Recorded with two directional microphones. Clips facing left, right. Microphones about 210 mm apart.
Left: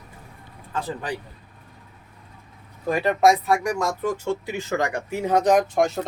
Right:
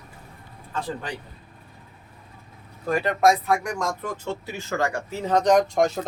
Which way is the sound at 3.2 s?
Centre (ahead or behind).